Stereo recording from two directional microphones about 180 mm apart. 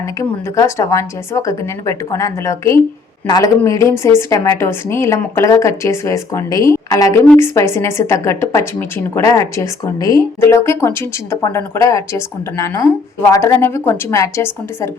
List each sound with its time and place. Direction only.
0.2 s a woman's voice: 15° left (ahead or behind)